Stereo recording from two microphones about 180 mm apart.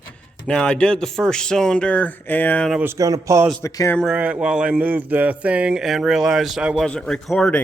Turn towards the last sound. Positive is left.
turn(degrees=5)  # may be behind; listen again after turning